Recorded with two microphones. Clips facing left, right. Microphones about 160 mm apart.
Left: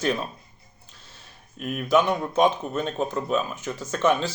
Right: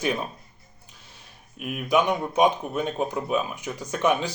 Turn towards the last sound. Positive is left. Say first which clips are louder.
# left 1 dB
turn(degrees=-15)  # may be behind; listen again after turning